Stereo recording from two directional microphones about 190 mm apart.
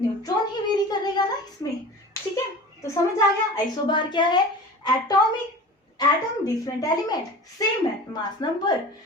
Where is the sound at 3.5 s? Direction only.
25° left (ahead or behind).